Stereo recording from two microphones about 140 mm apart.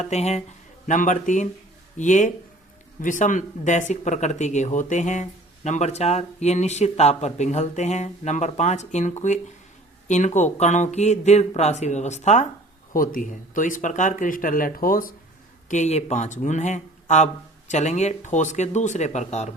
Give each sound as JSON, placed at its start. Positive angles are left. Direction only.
{"t": 0.0, "sound": "speech", "side_deg": 50}
{"t": 0.9, "sound": "speech", "side_deg": 65}
{"t": 12.9, "sound": "speech", "side_deg": 80}
{"t": 15.7, "sound": "speech", "side_deg": 55}